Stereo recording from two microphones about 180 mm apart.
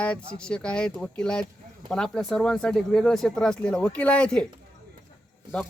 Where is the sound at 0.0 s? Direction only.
5° left (ahead or behind).